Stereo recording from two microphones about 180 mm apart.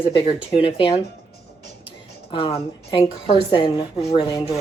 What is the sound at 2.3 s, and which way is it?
A woman's voice, 30° left (ahead or behind).